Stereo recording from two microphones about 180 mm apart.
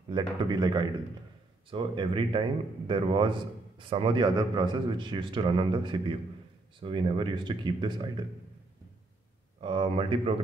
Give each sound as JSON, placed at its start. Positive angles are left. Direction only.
{"t": 0.1, "sound": "a man's voice", "side_deg": -25}
{"t": 9.6, "sound": "a man's voice", "side_deg": -30}